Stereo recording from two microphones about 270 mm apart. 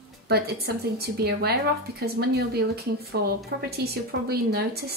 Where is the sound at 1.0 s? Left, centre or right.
Right.